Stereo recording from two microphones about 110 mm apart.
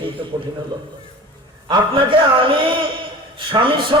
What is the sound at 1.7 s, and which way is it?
A man's voice, 50° right (ahead or behind).